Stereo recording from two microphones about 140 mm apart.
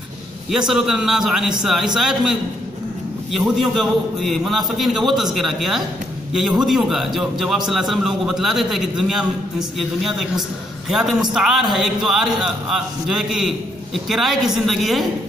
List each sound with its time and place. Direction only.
0.5 s a man's voice: 5° right (ahead or behind)